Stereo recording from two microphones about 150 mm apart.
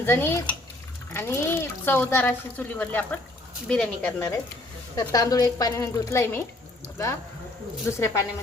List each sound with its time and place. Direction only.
0.0 s speech: 15° left (ahead or behind)
4.9 s a woman's voice: 25° left (ahead or behind)
7.9 s a woman's voice: 20° left (ahead or behind)